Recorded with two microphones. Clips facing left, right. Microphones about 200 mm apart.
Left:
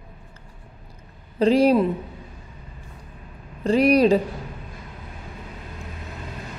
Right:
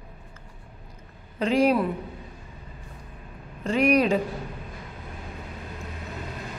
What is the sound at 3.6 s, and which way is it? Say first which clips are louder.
Speech: left 5 dB; 35° left (ahead or behind).